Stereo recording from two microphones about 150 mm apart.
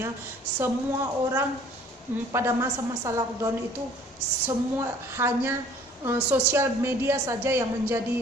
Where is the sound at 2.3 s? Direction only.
15° right (ahead or behind).